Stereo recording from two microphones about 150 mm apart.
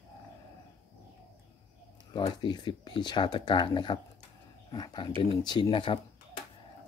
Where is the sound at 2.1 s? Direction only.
30° left (ahead or behind).